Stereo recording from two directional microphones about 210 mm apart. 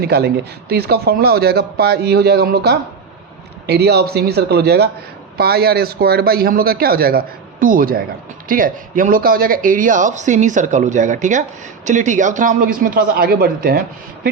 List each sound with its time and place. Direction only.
0.0 s a man's voice: 50° right (ahead or behind)